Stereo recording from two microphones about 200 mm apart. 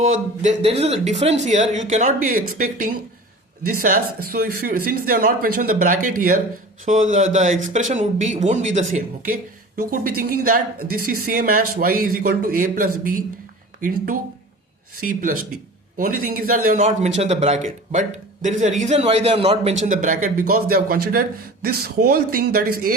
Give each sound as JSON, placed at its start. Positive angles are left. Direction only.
{"t": 0.4, "sound": "speech", "side_deg": -30}